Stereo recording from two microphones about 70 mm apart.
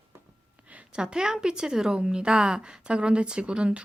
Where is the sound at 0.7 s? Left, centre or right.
Centre.